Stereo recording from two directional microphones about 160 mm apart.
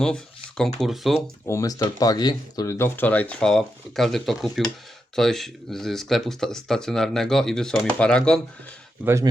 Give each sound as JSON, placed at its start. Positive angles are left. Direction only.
{"t": 0.0, "sound": "speech", "side_deg": 5}
{"t": 1.5, "sound": "speech", "side_deg": 20}
{"t": 9.0, "sound": "speech", "side_deg": -20}